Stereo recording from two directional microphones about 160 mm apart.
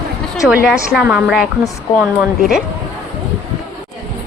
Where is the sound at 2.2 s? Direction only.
5° right (ahead or behind).